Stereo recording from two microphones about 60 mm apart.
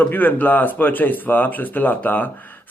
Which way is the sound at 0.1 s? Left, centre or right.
Left.